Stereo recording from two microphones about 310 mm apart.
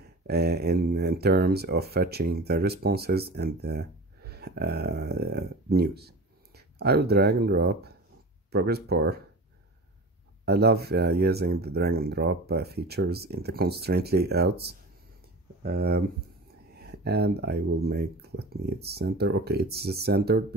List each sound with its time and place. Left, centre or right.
0.3 s speech: right
10.4 s speech: right